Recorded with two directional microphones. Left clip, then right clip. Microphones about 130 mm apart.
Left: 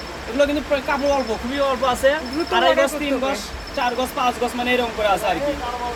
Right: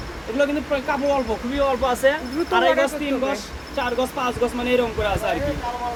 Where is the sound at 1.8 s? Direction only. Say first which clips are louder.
Left 1 dB; 40° right (ahead or behind).